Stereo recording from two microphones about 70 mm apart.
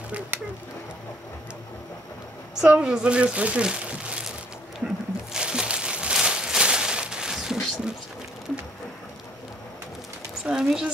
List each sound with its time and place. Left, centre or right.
2.6 s speech: centre
4.7 s crumpling: centre
10.4 s a sound: centre